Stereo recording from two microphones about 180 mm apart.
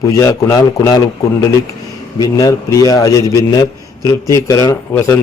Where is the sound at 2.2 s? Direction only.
20° left (ahead or behind).